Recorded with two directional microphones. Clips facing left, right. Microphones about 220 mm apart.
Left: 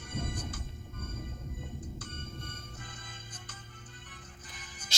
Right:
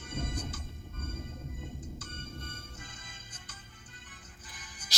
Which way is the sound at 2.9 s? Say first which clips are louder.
Left 3 dB; 55° left (ahead or behind).